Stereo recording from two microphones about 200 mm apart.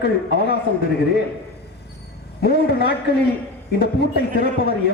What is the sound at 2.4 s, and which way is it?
A man's voice, 55° left (ahead or behind).